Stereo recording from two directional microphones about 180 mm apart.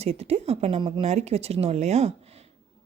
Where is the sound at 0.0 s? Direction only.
35° right (ahead or behind).